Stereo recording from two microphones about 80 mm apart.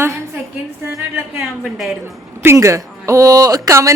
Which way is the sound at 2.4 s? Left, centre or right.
Right.